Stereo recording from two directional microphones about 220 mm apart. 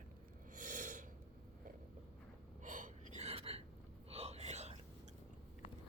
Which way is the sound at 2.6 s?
35° right (ahead or behind).